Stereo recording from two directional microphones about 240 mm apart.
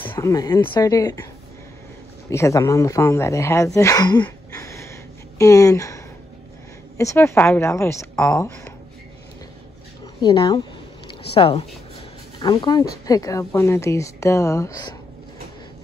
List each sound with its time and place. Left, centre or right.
0.0 s a woman's voice: centre
2.2 s a woman's voice: centre
7.0 s a woman's voice: centre
10.2 s a woman's voice: centre